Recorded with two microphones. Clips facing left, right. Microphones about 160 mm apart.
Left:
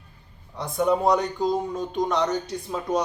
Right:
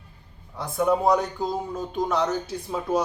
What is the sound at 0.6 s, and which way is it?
Speech, centre (ahead or behind).